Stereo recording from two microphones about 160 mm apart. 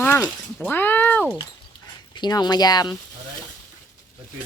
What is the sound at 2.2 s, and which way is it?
Speech, 25° left (ahead or behind).